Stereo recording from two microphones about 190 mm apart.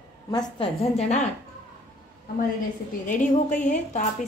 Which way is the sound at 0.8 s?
35° left (ahead or behind).